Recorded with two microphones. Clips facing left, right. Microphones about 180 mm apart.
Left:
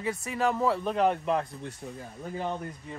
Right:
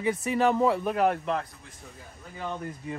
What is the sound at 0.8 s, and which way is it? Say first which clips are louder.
Speech: right 1 dB; 5° right (ahead or behind).